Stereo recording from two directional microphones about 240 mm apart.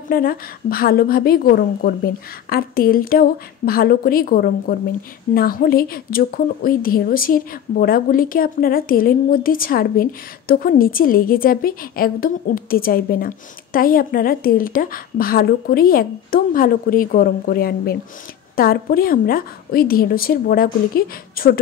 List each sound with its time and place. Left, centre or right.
0.1 s a woman's voice: left